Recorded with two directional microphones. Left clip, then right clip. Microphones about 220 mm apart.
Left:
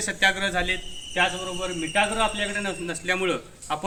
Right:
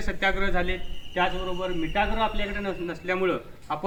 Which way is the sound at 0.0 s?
40° left (ahead or behind).